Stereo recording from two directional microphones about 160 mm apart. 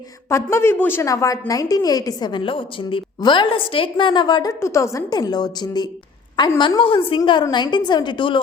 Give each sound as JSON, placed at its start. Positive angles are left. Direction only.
{"t": 0.3, "sound": "a woman's voice", "side_deg": 15}